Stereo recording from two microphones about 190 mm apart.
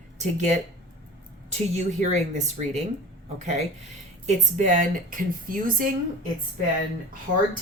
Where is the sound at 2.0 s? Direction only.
40° right (ahead or behind).